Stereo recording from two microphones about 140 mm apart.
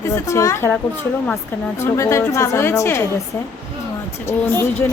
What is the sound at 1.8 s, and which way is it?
A woman's voice, 20° left (ahead or behind).